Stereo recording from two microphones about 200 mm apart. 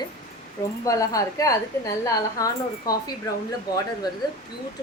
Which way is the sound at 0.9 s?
15° left (ahead or behind).